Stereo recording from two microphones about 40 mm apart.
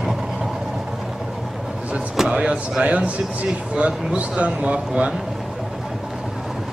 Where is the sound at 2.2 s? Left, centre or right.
Right.